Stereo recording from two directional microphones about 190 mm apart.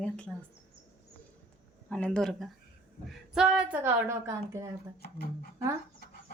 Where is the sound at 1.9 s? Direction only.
5° left (ahead or behind); by 4.7 s 15° right (ahead or behind).